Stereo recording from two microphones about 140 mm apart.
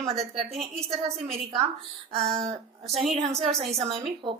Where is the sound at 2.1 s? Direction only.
45° right (ahead or behind).